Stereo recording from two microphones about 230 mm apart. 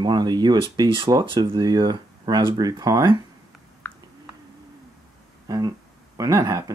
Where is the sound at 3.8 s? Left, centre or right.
Centre.